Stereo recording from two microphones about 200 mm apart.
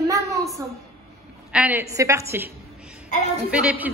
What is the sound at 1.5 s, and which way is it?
A woman's voice, 5° right (ahead or behind).